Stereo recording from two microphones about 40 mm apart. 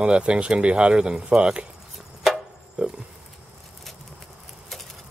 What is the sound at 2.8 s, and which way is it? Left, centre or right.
Speech, centre.